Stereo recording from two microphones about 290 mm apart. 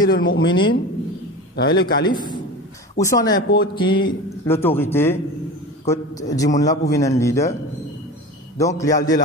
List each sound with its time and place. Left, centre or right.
0.0 s speech: left
0.5 s a man's voice: centre
1.6 s a man's voice: left
2.0 s a man's voice: centre
8.5 s a man's voice: centre